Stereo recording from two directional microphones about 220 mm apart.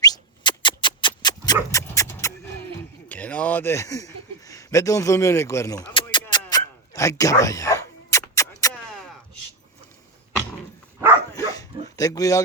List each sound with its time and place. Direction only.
0.0 s a sound: 20° left (ahead or behind)
3.1 s speech: 5° left (ahead or behind); by 6.2 s 20° left (ahead or behind)
6.2 s dog: 15° left (ahead or behind)
11.3 s dog: 15° left (ahead or behind)